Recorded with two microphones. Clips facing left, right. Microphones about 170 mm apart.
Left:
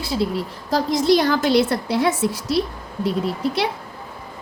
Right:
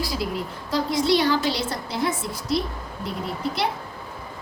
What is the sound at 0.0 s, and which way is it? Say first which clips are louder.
A woman's voice: left 4 dB; 30° left (ahead or behind).